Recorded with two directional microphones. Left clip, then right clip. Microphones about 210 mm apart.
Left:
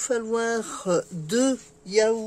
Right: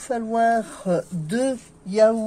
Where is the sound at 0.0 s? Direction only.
50° left (ahead or behind).